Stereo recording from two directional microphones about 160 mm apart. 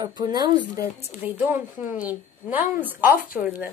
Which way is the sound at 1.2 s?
10° right (ahead or behind).